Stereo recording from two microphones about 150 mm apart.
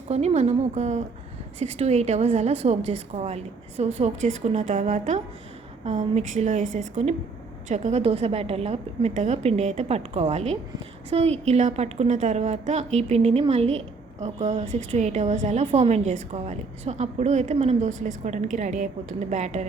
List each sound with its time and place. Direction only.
0.1 s a woman's voice: 45° right (ahead or behind)